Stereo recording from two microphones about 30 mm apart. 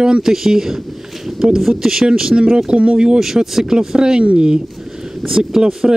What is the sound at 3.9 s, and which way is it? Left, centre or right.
Speech, right.